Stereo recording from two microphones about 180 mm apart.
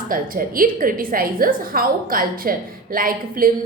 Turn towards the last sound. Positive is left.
turn(degrees=-50)  # may be behind; listen again after turning